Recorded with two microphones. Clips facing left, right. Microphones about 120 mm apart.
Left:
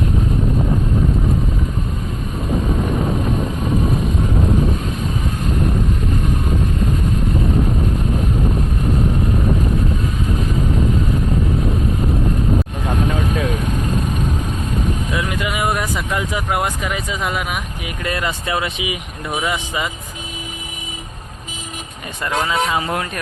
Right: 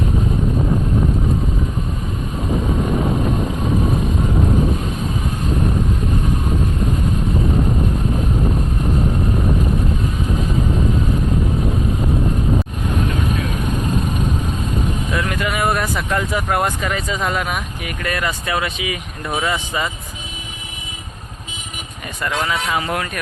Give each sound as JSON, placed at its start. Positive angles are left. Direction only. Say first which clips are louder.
{"t": 15.1, "sound": "speech", "louder": "right 1 dB", "side_deg": 15}
{"t": 18.0, "sound": "speech", "louder": "even", "side_deg": 25}
{"t": 22.2, "sound": "speech", "louder": "left 2 dB", "side_deg": 25}